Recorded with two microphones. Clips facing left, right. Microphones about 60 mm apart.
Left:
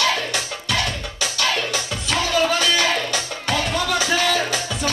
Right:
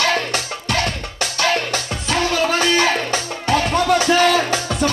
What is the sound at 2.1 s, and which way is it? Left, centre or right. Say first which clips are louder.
Music: right 1 dB; right.